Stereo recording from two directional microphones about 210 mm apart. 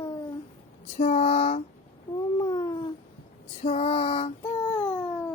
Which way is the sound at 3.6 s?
25° left (ahead or behind).